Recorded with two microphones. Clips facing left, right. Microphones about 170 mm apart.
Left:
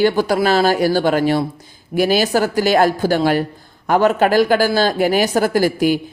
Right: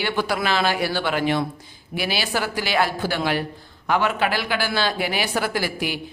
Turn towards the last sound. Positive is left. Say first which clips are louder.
# left 10 dB
turn(degrees=45)  # may be behind; listen again after turning